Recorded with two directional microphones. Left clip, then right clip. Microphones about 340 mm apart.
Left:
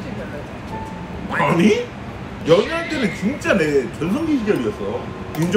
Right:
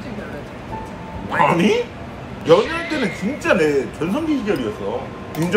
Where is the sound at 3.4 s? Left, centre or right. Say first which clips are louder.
Right 1 dB; centre.